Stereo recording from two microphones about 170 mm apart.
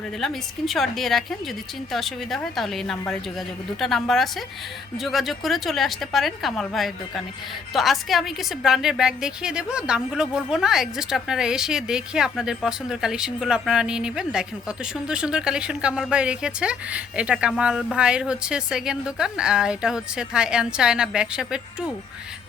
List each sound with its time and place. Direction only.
0.2 s a woman's voice: centre (ahead or behind)